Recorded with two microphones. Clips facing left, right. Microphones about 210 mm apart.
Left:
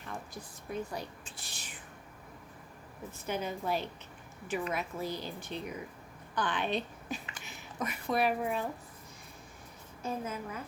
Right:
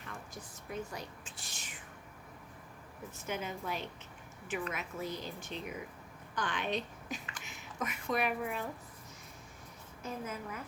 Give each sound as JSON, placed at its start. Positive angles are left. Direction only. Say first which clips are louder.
{"t": 0.9, "sound": "whispering", "louder": "left 4 dB", "side_deg": 35}
{"t": 3.2, "sound": "a woman's voice", "louder": "left 4 dB", "side_deg": 35}
{"t": 10.0, "sound": "a woman's voice", "louder": "left 4 dB", "side_deg": 30}